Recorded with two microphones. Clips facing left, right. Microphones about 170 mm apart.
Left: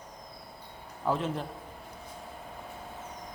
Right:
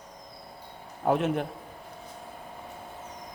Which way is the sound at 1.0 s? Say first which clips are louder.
Right 5 dB; 65° right (ahead or behind).